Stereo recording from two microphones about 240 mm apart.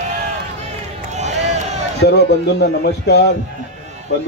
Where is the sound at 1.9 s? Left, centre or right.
Left.